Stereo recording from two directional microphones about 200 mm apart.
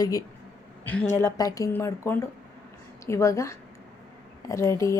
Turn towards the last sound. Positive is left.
turn(degrees=15)  # may be behind; listen again after turning